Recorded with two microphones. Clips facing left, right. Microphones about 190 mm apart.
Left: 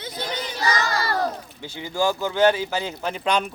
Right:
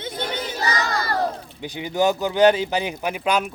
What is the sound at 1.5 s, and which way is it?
Speech, 15° right (ahead or behind).